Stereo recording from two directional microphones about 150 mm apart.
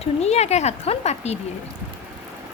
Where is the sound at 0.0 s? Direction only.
45° left (ahead or behind).